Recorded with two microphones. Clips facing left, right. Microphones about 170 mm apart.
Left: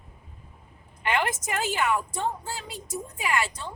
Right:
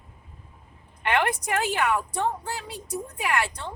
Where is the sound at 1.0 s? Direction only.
60° right (ahead or behind).